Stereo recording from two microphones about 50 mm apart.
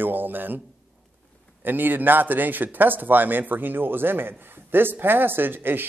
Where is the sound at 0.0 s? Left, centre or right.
Right.